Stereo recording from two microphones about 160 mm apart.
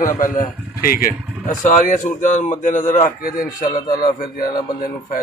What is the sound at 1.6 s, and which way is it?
A man's voice, 50° left (ahead or behind).